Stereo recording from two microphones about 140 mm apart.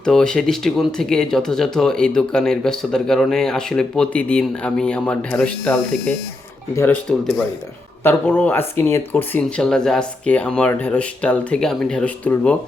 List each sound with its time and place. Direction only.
0.0 s speech: 5° left (ahead or behind)
9.6 s speech: 5° left (ahead or behind)